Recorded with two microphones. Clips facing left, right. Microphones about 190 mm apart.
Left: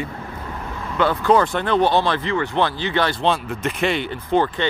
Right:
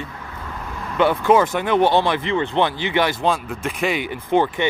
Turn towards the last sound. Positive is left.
turn(degrees=-15)  # may be behind; listen again after turning